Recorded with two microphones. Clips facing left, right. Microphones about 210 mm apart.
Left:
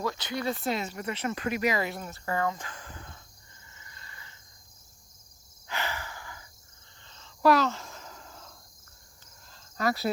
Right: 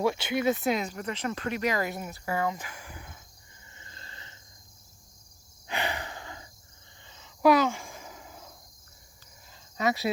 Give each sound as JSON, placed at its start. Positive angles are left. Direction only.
{"t": 0.0, "sound": "speech", "side_deg": -20}
{"t": 0.6, "sound": "speech", "side_deg": 0}
{"t": 2.0, "sound": "speech", "side_deg": -10}
{"t": 3.8, "sound": "cricket", "side_deg": -30}
{"t": 5.6, "sound": "a sound", "side_deg": -15}
{"t": 7.0, "sound": "a sound", "side_deg": -10}
{"t": 9.5, "sound": "cricket", "side_deg": 0}